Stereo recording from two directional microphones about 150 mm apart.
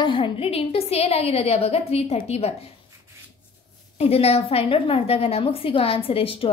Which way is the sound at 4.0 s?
45° left (ahead or behind).